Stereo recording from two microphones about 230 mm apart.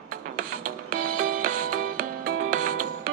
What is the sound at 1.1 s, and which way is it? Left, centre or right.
Music, right.